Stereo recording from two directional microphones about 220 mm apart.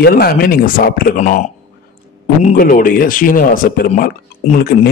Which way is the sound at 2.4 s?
40° left (ahead or behind).